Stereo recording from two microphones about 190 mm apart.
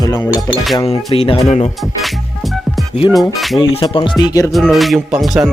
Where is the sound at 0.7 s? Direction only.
30° left (ahead or behind).